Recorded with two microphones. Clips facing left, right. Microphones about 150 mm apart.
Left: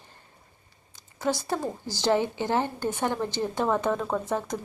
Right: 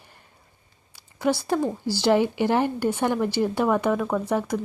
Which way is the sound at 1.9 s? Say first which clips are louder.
Right 4 dB; 15° left (ahead or behind).